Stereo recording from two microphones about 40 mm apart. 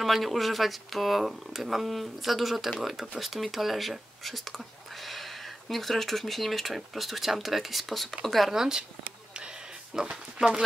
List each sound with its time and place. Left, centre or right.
0.0 s speech: centre
5.7 s speech: centre
8.5 s speech: centre
10.0 s speech: centre